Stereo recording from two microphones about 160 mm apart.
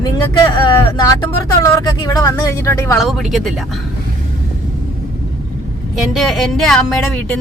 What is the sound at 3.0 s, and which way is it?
Speech, centre (ahead or behind).